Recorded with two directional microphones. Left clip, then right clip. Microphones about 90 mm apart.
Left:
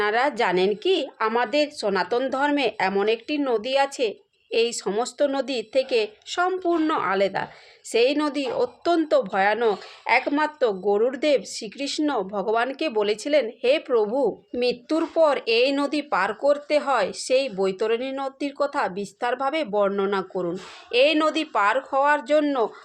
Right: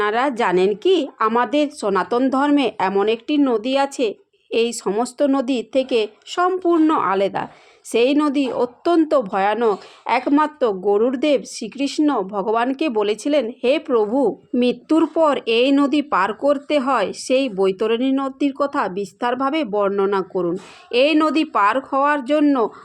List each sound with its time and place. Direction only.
0.0 s speech: 45° right (ahead or behind)
3.2 s speech: 55° right (ahead or behind)
4.5 s speech: 50° right (ahead or behind)
4.9 s speech: 40° right (ahead or behind); by 22.7 s 55° right (ahead or behind)